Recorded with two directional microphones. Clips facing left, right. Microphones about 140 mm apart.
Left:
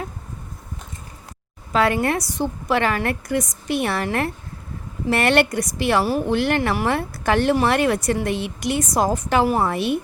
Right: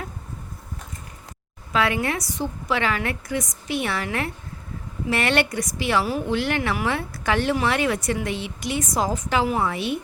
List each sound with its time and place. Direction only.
1.7 s speech: 40° left (ahead or behind)
2.2 s a woman's voice: 60° left (ahead or behind); by 8.2 s 40° left (ahead or behind)
8.2 s a woman's voice: 55° left (ahead or behind)
9.5 s speech: 35° left (ahead or behind)
9.7 s a woman's voice: 50° left (ahead or behind)